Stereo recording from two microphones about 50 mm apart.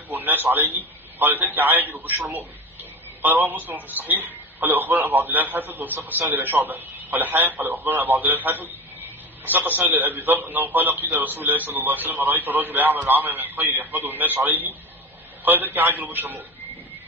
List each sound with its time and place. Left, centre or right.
0.2 s a sound: right
0.6 s a man's voice: right
7.6 s speech: right
8.2 s a man's voice: right
13.3 s a man's voice: right